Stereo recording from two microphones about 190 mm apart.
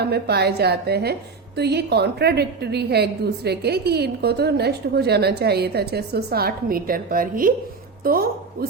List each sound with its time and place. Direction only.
0.0 s a woman's voice: 60° right (ahead or behind)